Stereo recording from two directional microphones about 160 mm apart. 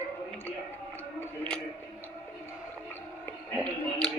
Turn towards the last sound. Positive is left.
turn(degrees=5)  # may be behind; listen again after turning